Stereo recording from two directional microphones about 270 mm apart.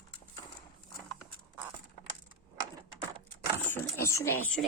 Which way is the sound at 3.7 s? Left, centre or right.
Centre.